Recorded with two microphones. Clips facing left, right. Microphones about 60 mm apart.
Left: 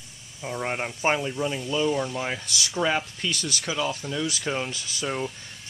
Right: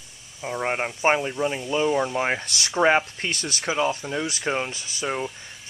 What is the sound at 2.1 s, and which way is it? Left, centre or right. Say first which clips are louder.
Speech: right 5 dB; right.